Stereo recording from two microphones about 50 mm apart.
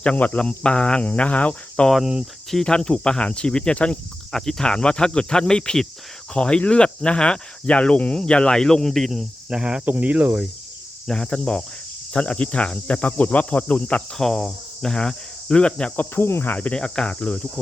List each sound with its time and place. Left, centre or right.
0.0 s speech: left
2.5 s speech: centre
2.7 s speech: centre
4.3 s speech: centre
9.5 s speech: centre
9.8 s cricket: right
11.1 s speech: centre
14.2 s cricket: centre
16.1 s cricket: left
16.5 s speech: left
16.7 s speech: centre